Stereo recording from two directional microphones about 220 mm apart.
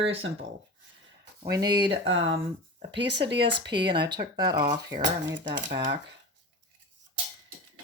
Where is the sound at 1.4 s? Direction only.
15° right (ahead or behind).